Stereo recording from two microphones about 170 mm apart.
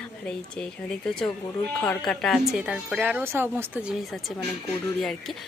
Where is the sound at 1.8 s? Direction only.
10° left (ahead or behind).